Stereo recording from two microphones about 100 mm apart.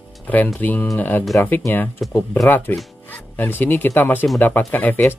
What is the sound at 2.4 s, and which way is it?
Speech, 25° left (ahead or behind).